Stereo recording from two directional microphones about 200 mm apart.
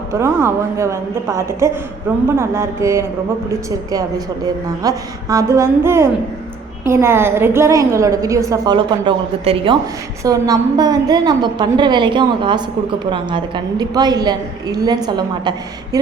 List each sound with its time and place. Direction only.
0.1 s a woman's voice: 10° right (ahead or behind)
4.8 s a woman's voice: 15° right (ahead or behind)